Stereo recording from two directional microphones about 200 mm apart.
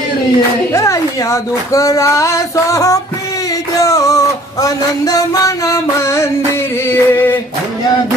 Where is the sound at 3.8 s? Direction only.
15° left (ahead or behind).